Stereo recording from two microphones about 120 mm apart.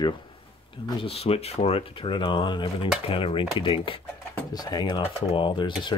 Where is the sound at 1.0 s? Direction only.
55° left (ahead or behind).